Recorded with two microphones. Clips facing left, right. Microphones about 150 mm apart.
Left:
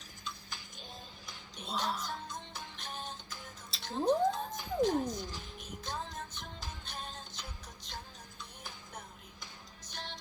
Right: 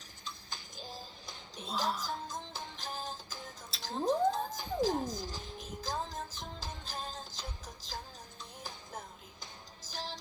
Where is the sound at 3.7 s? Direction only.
Centre (ahead or behind).